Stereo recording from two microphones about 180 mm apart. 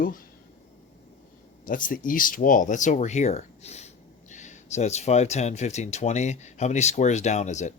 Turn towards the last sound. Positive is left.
turn(degrees=40)  # may be behind; listen again after turning